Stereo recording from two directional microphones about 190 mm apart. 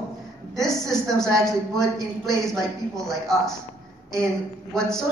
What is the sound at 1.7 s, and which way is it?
Speech, 15° right (ahead or behind).